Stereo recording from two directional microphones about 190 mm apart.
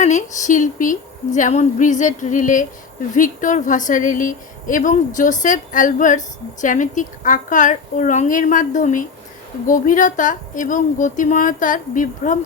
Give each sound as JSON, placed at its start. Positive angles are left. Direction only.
{"t": 0.0, "sound": "a woman's voice", "side_deg": 40}